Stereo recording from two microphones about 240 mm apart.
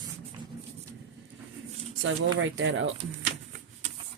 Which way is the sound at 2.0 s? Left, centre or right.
Right.